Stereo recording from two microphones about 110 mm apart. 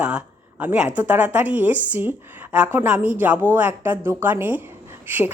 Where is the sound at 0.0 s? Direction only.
10° right (ahead or behind).